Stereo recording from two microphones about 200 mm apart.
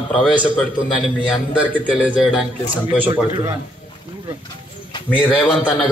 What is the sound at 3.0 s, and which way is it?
Speech, 25° right (ahead or behind).